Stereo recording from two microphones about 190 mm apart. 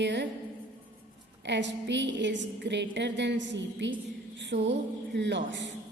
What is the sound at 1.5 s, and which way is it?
A woman's voice, 70° right (ahead or behind).